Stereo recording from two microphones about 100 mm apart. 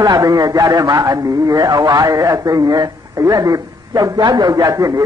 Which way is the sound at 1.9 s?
35° right (ahead or behind).